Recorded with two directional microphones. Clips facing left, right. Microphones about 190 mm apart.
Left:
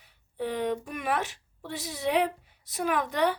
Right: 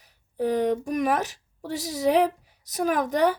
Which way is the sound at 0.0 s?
40° right (ahead or behind).